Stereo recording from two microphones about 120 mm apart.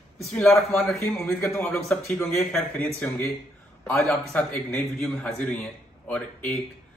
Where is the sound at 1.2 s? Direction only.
20° left (ahead or behind).